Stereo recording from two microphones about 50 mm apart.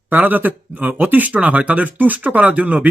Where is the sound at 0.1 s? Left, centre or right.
Right.